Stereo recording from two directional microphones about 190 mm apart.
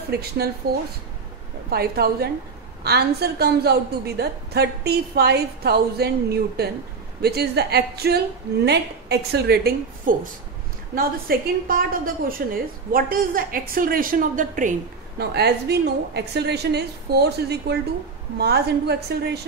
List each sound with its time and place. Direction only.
0.1 s a woman's voice: 55° right (ahead or behind)
1.7 s a woman's voice: 55° right (ahead or behind)
15.3 s a woman's voice: 60° right (ahead or behind)